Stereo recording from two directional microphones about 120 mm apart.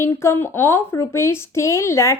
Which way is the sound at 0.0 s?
20° left (ahead or behind).